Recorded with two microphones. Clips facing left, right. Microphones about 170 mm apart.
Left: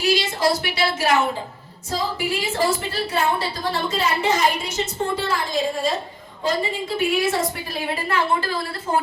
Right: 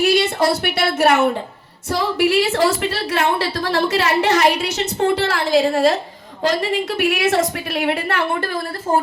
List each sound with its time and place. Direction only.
0.0 s a woman's voice: 60° right (ahead or behind)